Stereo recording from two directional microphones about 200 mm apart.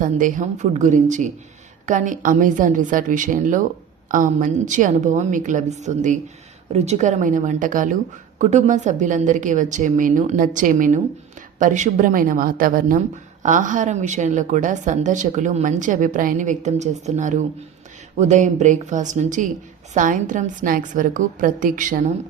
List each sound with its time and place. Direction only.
0.0 s a woman's voice: 40° right (ahead or behind)